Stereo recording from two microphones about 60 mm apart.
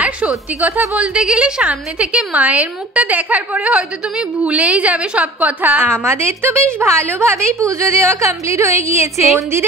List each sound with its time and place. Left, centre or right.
0.0 s a woman's voice: right
5.9 s a woman's voice: right